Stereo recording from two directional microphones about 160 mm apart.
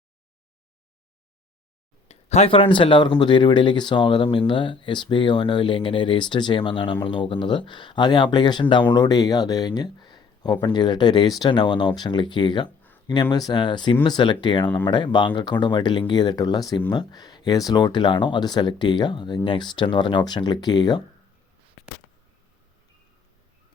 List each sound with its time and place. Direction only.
2.0 s speech: 40° left (ahead or behind); by 21.0 s 25° left (ahead or behind)